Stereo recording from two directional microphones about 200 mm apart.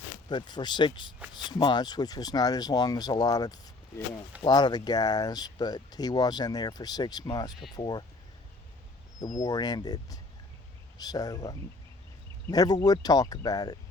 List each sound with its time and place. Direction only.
0.3 s speech: 20° left (ahead or behind)
9.4 s speech: 20° left (ahead or behind)